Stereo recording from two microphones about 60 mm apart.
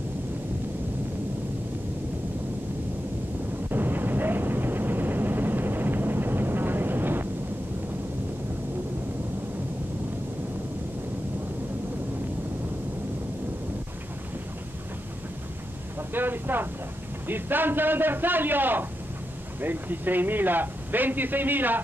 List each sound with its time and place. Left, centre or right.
3.7 s vehicle: right
16.1 s speech: right